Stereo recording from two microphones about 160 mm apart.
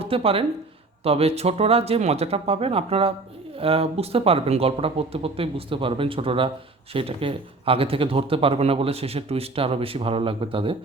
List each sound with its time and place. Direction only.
0.0 s speech: 35° right (ahead or behind)